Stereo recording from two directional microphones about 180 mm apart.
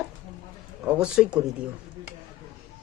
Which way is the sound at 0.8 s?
5° right (ahead or behind).